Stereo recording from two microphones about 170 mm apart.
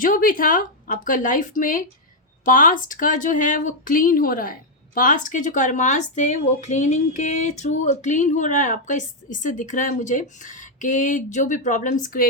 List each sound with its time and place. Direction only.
0.0 s speech: 55° left (ahead or behind)